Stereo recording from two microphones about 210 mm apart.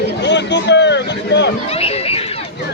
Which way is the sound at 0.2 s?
55° left (ahead or behind).